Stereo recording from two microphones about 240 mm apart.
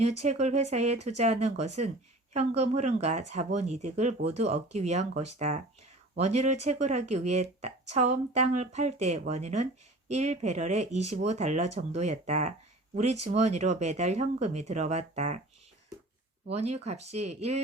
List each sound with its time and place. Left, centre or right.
0.0 s speech: right
16.5 s speech: right